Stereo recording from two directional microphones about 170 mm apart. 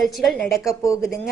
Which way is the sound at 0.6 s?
20° left (ahead or behind).